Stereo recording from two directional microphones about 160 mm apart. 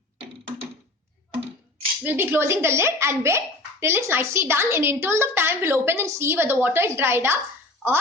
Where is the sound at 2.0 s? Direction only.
10° right (ahead or behind).